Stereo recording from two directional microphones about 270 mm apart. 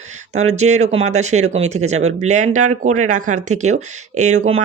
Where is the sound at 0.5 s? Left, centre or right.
Right.